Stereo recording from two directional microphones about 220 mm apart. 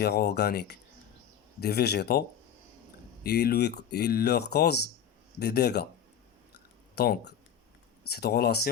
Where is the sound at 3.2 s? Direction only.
45° left (ahead or behind).